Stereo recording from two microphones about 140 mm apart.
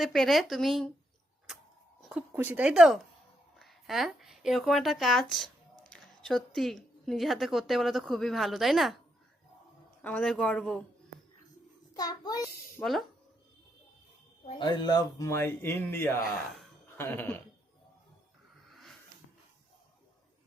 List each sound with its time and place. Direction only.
0.0 s a woman's voice: centre (ahead or behind)
2.0 s a woman's voice: 10° right (ahead or behind)
10.0 s speech: 10° left (ahead or behind)
11.9 s a child's voice: 25° left (ahead or behind)
12.8 s a woman's voice: centre (ahead or behind)
14.6 s speech: 35° left (ahead or behind); by 17.3 s 15° left (ahead or behind)
18.7 s a sound: centre (ahead or behind)